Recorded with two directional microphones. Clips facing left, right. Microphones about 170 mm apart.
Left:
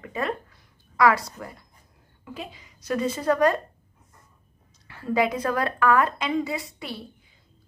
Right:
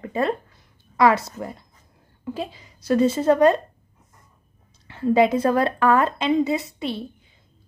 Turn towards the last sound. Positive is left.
turn(degrees=-25)  # may be behind; listen again after turning